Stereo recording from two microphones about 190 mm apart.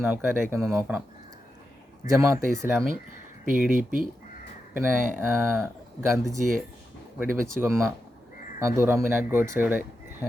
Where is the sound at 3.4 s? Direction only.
45° right (ahead or behind).